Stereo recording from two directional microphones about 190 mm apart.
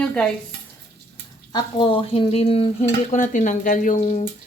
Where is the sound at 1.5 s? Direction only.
25° left (ahead or behind).